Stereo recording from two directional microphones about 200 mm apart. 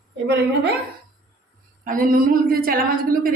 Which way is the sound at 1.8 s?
45° right (ahead or behind).